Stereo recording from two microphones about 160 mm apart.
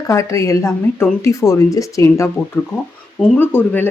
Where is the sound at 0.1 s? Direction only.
20° left (ahead or behind).